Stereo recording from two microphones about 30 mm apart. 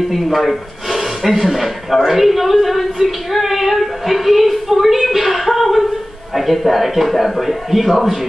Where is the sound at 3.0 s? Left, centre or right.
Centre.